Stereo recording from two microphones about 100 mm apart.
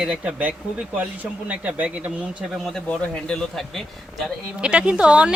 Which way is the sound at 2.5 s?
5° left (ahead or behind).